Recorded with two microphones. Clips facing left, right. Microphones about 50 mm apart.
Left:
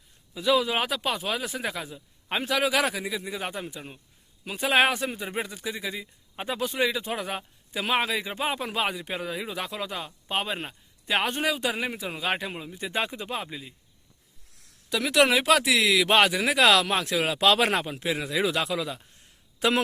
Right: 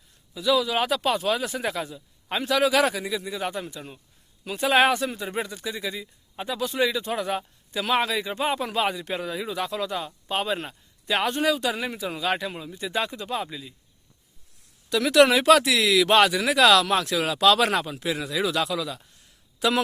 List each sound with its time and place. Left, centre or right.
0.3 s speech: left
0.8 s speech: centre
1.9 s speech: centre
6.7 s speech: centre
14.8 s speech: centre; by 19.8 s left